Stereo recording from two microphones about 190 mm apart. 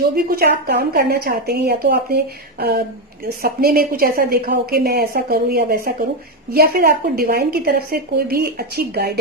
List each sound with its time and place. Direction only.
0.0 s a woman's voice: 50° right (ahead or behind)